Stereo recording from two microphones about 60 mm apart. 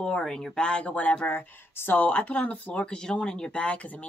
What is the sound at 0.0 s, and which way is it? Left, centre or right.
Speech, centre.